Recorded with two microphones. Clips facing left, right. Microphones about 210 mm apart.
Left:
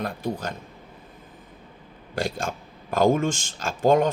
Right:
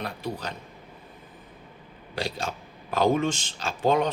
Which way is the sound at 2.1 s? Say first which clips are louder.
Left 3 dB; 50° left (ahead or behind).